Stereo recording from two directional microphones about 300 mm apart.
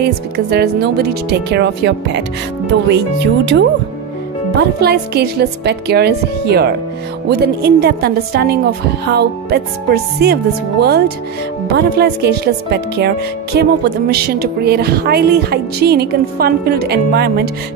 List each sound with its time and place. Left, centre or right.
0.0 s speech: right
4.6 s speech: right